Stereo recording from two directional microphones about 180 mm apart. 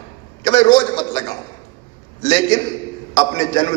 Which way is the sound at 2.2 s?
25° left (ahead or behind).